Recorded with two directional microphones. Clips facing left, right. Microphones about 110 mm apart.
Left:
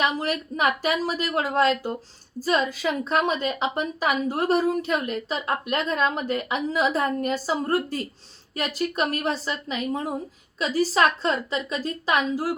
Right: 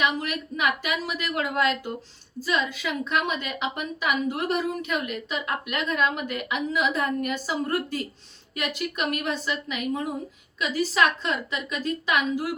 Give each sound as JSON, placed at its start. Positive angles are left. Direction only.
{"t": 0.0, "sound": "a woman's voice", "side_deg": 35}